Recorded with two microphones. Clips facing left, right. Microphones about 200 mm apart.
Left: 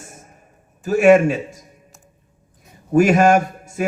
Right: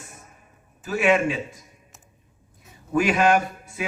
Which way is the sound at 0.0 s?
45° left (ahead or behind).